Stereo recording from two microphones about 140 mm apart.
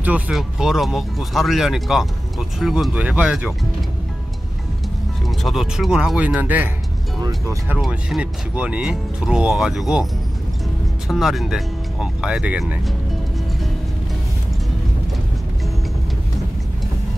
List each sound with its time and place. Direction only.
0.0 s speech: 5° right (ahead or behind)
5.2 s speech: centre (ahead or behind)
7.2 s speech: 30° right (ahead or behind)
7.8 s speech: 5° right (ahead or behind)
11.1 s speech: centre (ahead or behind)